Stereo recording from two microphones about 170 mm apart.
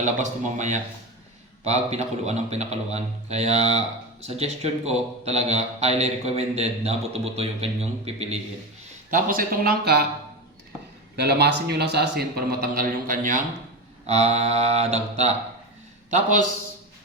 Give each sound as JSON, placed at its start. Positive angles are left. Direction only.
{"t": 0.0, "sound": "a man's voice", "side_deg": -45}
{"t": 9.0, "sound": "speech", "side_deg": -55}
{"t": 11.2, "sound": "a man's voice", "side_deg": -75}
{"t": 14.1, "sound": "a man's voice", "side_deg": -40}